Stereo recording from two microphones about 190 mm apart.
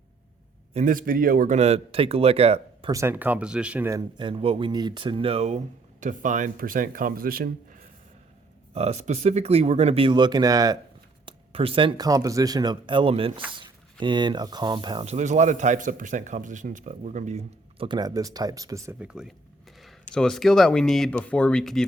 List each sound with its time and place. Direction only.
0.7 s a man's voice: 40° right (ahead or behind)
2.9 s speech: 15° right (ahead or behind); by 7.8 s 50° right (ahead or behind)
8.7 s a man's voice: 35° right (ahead or behind); by 21.8 s centre (ahead or behind)